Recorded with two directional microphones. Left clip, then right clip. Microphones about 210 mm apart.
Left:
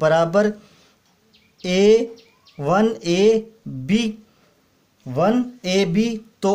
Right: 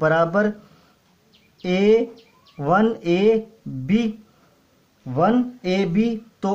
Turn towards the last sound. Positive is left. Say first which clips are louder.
# left 2 dB
turn(degrees=20)  # may be behind; listen again after turning